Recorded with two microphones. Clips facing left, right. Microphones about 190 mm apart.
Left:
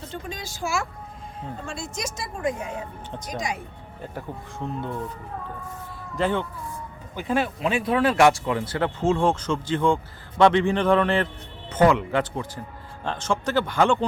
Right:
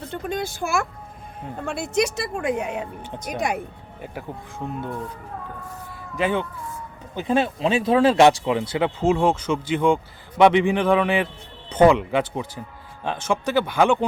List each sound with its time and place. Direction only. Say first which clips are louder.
0.1 s speech: right 10 dB; 60° right (ahead or behind)
4.6 s speech: right 1 dB; 10° right (ahead or behind)
6.1 s speech: right 1 dB; 15° right (ahead or behind)
7.2 s speech: right 3 dB; 25° right (ahead or behind)